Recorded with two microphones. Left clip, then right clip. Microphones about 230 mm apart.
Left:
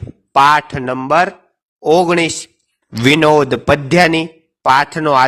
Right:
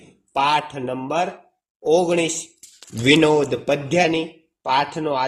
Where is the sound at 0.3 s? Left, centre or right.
Left.